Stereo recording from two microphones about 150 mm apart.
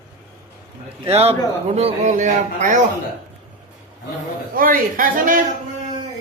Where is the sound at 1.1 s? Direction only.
40° right (ahead or behind).